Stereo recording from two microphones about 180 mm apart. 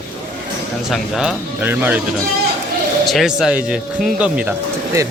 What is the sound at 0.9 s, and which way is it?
Speech, 5° right (ahead or behind).